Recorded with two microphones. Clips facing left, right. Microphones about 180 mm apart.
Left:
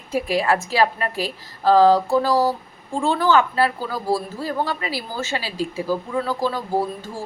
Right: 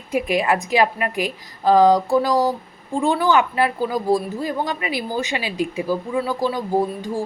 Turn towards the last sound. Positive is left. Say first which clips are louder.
# right 3 dB
turn(degrees=-15)  # may be behind; listen again after turning